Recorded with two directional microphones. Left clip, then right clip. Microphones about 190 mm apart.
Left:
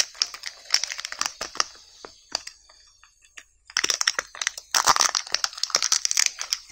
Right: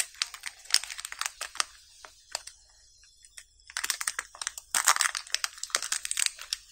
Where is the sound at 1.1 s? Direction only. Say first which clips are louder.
Left 4 dB; 15° left (ahead or behind).